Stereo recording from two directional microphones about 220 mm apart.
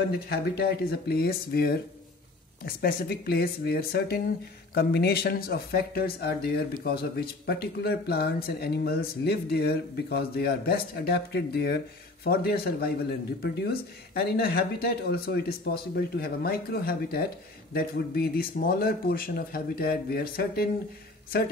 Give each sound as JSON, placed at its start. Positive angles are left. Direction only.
{"t": 0.1, "sound": "speech", "side_deg": 45}